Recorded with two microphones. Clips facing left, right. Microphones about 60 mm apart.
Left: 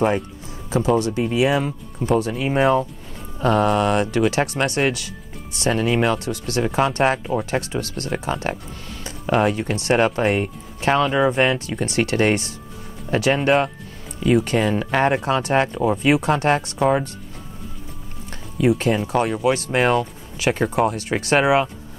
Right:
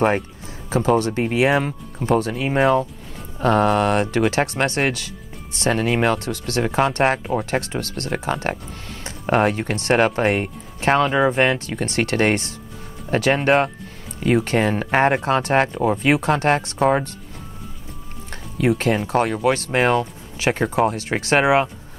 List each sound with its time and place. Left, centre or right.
0.7 s speech: right
18.8 s speech: right